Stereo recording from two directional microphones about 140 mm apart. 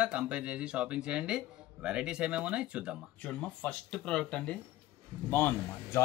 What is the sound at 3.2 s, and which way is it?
Speech, 10° left (ahead or behind).